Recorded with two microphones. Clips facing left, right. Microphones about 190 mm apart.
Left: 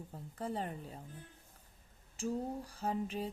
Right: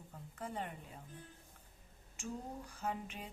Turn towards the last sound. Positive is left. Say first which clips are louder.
# left 6 dB
turn(degrees=35)  # may be behind; listen again after turning